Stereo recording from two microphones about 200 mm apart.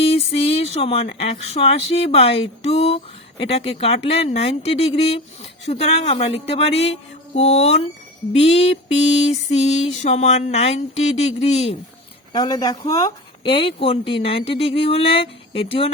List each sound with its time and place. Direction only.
0.0 s speech: 30° left (ahead or behind)
12.3 s speech: 20° left (ahead or behind)